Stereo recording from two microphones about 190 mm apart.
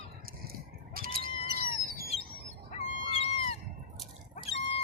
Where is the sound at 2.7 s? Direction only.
35° left (ahead or behind).